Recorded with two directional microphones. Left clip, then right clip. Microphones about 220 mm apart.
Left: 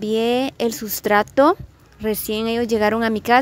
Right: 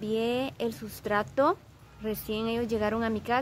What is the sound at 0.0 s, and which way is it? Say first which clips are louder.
A woman's voice: left 10 dB; 35° left (ahead or behind).